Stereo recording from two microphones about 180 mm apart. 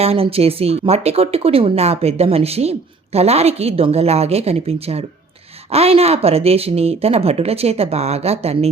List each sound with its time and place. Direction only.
0.0 s speech: 35° right (ahead or behind)